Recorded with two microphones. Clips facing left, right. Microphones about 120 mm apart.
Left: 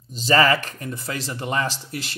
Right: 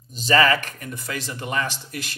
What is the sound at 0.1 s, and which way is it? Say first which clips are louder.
A man's voice: left 1 dB; 30° left (ahead or behind).